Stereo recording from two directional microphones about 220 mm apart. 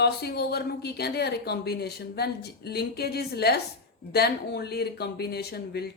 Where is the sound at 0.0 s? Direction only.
45° left (ahead or behind).